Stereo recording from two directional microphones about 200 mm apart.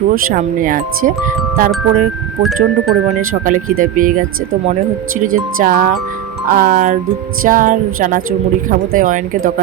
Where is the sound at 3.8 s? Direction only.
40° right (ahead or behind).